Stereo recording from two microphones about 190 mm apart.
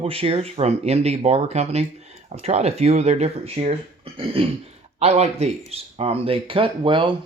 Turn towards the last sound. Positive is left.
turn(degrees=-25)  # may be behind; listen again after turning